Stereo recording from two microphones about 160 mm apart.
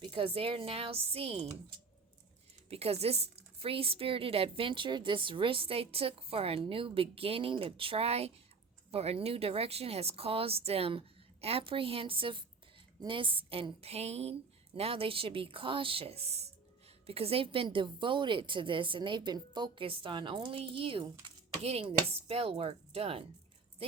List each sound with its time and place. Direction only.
0.0 s a woman's voice: 30° right (ahead or behind)
2.6 s a woman's voice: 40° right (ahead or behind)